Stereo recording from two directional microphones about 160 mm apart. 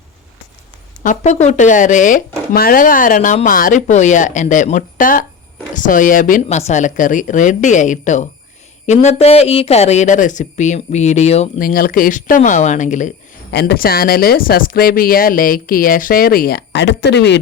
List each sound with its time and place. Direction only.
1.0 s speech: 50° left (ahead or behind)
6.6 s speech: 45° left (ahead or behind)
11.6 s speech: 65° left (ahead or behind)
13.5 s speech: 90° left